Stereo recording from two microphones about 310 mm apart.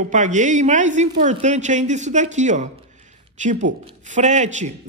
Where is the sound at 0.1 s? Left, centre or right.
Right.